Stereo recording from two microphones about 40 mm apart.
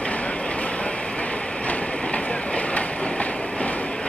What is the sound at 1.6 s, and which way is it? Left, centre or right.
Train, left.